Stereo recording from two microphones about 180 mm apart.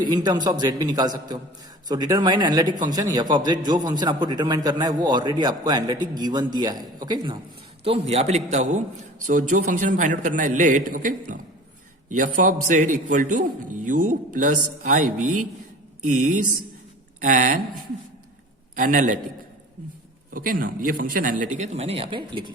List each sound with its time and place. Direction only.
0.0 s a man's voice: 25° right (ahead or behind)
7.9 s a man's voice: 35° right (ahead or behind)
18.8 s a man's voice: 50° right (ahead or behind)
20.3 s a man's voice: 50° right (ahead or behind); by 22.5 s 25° right (ahead or behind)